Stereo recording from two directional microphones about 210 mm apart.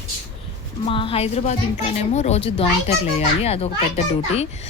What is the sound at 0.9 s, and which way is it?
A woman's voice, 25° left (ahead or behind).